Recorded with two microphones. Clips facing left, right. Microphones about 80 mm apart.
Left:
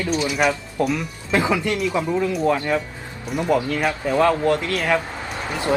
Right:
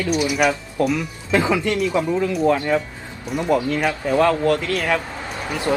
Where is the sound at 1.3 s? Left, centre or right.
Centre.